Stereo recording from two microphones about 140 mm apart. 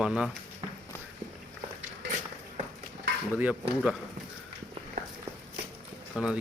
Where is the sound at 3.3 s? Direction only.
10° right (ahead or behind).